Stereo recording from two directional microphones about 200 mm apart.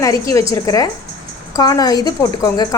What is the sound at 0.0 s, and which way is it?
Speech, 15° left (ahead or behind).